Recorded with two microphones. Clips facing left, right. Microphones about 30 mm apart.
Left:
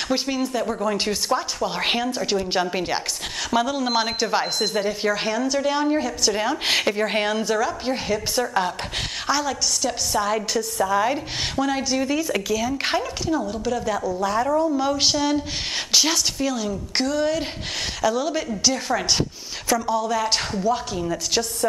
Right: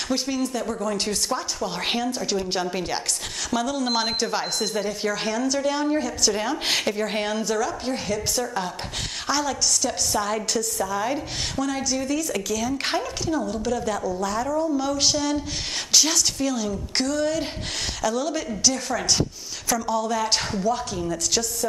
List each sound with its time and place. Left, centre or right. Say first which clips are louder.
0.1 s speech: left 1 dB; centre
9.3 s speech: left 1 dB; centre
10.6 s speech: left 5 dB; centre
14.2 s speech: left 5 dB; centre